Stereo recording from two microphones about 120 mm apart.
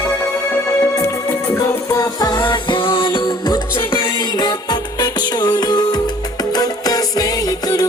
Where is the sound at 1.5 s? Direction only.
30° left (ahead or behind).